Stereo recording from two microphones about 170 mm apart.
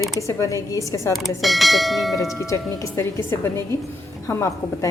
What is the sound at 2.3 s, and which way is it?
A woman's voice, 15° left (ahead or behind).